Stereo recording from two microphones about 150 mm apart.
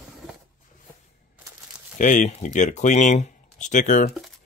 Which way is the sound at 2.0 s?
55° left (ahead or behind).